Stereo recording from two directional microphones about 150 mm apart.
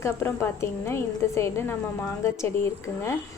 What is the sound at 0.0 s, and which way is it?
A woman's voice, 20° left (ahead or behind).